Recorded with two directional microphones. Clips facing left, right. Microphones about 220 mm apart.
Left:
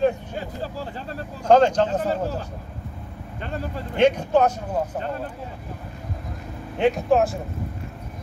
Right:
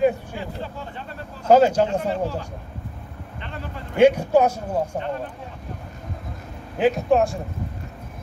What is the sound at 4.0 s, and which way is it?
Speech, 10° right (ahead or behind).